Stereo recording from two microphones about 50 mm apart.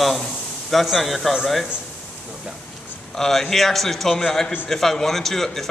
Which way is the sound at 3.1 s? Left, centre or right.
Centre.